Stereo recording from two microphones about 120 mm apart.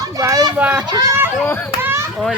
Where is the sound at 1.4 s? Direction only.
15° left (ahead or behind).